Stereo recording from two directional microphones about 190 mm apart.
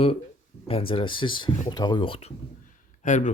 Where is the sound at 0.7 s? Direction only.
30° left (ahead or behind).